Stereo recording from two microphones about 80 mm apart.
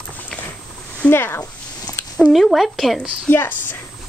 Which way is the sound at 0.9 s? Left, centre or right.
Left.